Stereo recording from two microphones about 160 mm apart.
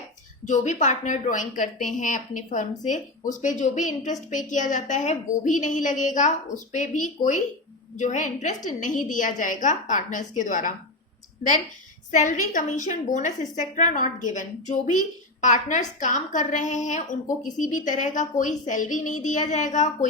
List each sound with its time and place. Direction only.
0.4 s a woman's voice: 50° left (ahead or behind)
12.1 s a woman's voice: 50° left (ahead or behind)